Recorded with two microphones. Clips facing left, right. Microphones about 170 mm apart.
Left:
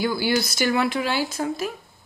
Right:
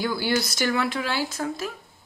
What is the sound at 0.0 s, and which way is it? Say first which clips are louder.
Speech: left 2 dB; 10° left (ahead or behind).